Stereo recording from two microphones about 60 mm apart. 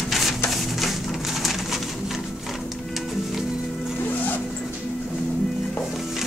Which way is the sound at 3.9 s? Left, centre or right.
Left.